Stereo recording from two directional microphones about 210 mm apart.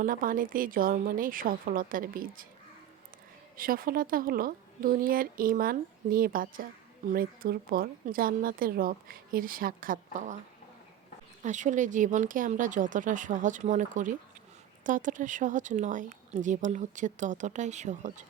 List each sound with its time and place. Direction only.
0.0 s speech: 40° right (ahead or behind)
3.6 s a woman's voice: 45° right (ahead or behind)
11.4 s speech: 35° right (ahead or behind)